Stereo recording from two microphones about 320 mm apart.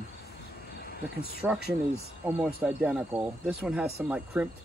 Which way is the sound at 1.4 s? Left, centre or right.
Centre.